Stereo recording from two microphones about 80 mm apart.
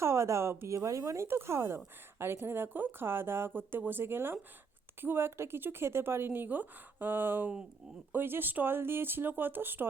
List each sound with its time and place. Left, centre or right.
0.0 s speech: right